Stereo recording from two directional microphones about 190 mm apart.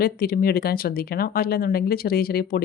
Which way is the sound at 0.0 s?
50° left (ahead or behind).